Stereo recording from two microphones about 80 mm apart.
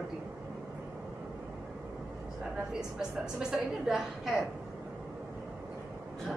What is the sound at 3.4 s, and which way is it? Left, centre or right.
A man's voice, centre.